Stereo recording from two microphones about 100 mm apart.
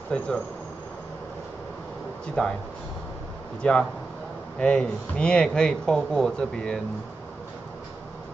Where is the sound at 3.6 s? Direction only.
10° left (ahead or behind).